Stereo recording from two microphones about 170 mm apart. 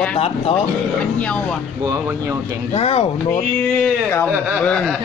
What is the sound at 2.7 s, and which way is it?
Speech, 35° left (ahead or behind).